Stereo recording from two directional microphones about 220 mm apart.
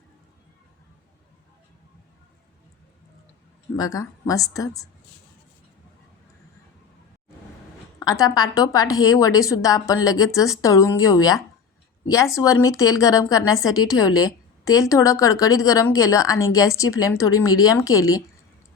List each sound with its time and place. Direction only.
3.8 s a woman's voice: 15° left (ahead or behind)
7.9 s a woman's voice: 15° left (ahead or behind)